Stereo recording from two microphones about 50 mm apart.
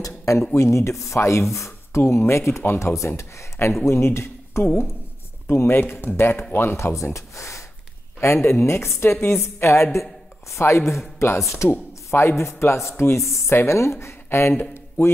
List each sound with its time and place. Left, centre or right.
0.0 s a sound: left
0.6 s sanding: left
1.5 s speech: left
5.5 s speech: left
6.8 s sanding: left
7.2 s speech: left
8.2 s speech: left
8.5 s speech: left
10.5 s speech: left
10.8 s speech: centre
11.1 s speech: left
11.7 s speech: left